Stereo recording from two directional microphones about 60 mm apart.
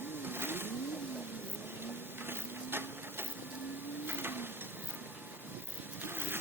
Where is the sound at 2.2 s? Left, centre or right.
Right.